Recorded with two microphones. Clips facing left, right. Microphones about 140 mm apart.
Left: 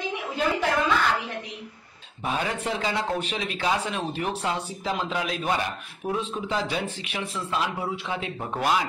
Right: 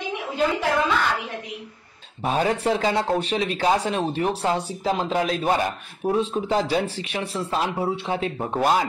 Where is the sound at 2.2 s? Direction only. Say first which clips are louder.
Right 6 dB; 35° right (ahead or behind).